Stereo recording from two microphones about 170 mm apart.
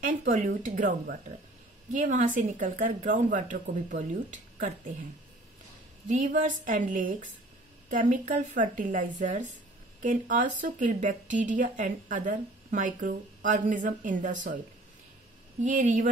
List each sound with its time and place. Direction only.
0.0 s speech: 50° right (ahead or behind)
6.0 s speech: 50° right (ahead or behind)
15.6 s speech: 50° right (ahead or behind)